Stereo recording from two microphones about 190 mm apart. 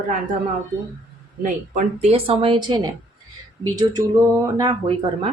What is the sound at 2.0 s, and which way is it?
Speech, 30° right (ahead or behind).